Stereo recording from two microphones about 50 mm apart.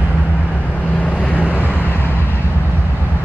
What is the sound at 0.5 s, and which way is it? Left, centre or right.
Vehicle, left.